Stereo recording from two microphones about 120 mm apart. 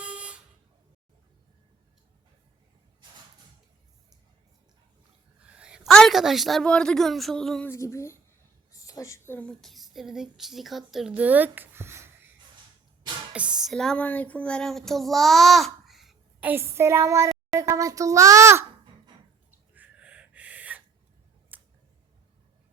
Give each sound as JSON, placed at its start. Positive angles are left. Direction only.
{"t": 0.0, "sound": "vehicle horn", "side_deg": -10}
{"t": 5.4, "sound": "a sound", "side_deg": -10}
{"t": 5.9, "sound": "speech", "side_deg": 5}
{"t": 7.7, "sound": "a child's voice", "side_deg": 25}
{"t": 9.5, "sound": "speech", "side_deg": 0}
{"t": 13.6, "sound": "speech", "side_deg": 0}
{"t": 16.4, "sound": "a child's voice", "side_deg": -15}
{"t": 19.7, "sound": "gasp", "side_deg": -10}
{"t": 21.5, "sound": "a sound", "side_deg": -15}